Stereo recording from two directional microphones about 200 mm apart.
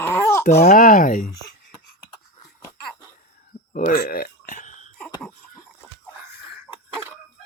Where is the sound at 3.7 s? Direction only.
45° left (ahead or behind).